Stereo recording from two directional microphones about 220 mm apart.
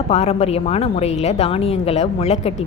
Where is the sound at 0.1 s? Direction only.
30° left (ahead or behind).